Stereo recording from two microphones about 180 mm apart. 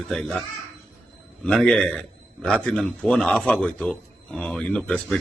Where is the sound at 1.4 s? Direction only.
5° left (ahead or behind).